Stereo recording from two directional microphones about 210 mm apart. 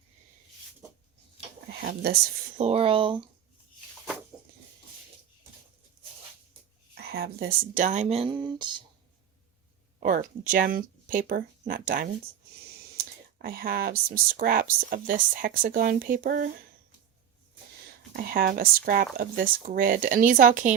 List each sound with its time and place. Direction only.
1.8 s a woman's voice: 50° right (ahead or behind)
2.6 s speech: 30° right (ahead or behind)
6.0 s a sound: 20° right (ahead or behind)
6.9 s speech: 45° right (ahead or behind); by 8.8 s 20° right (ahead or behind)
10.0 s speech: 40° right (ahead or behind)
13.4 s speech: 45° right (ahead or behind)
18.2 s speech: 45° right (ahead or behind)